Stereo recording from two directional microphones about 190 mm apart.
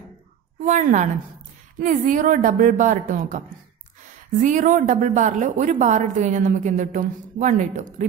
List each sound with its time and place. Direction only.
0.7 s a woman's voice: 40° right (ahead or behind)